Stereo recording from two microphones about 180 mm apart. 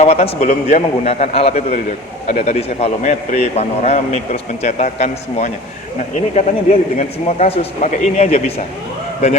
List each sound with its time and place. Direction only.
0.0 s a man's voice: 35° left (ahead or behind)